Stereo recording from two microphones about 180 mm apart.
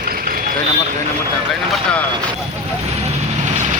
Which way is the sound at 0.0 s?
55° right (ahead or behind).